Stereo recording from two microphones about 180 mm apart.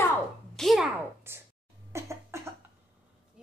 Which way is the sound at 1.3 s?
15° right (ahead or behind).